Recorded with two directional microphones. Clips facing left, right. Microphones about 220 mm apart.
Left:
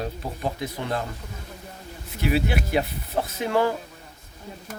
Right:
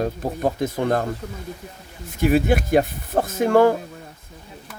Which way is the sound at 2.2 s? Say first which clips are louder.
Right 6 dB; 45° right (ahead or behind).